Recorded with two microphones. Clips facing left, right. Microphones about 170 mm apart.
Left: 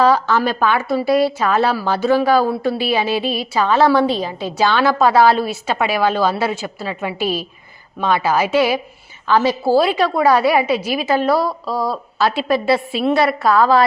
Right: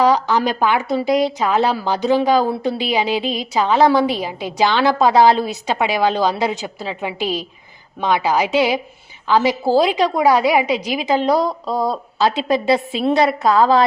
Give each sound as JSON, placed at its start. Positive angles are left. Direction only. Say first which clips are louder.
{"t": 0.0, "sound": "a woman's voice", "louder": "left 1 dB", "side_deg": -15}